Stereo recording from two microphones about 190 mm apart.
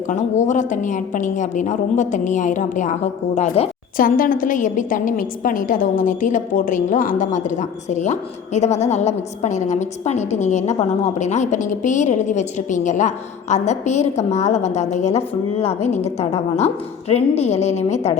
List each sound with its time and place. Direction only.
0.1 s a woman's voice: 40° left (ahead or behind)
3.9 s a woman's voice: 45° left (ahead or behind)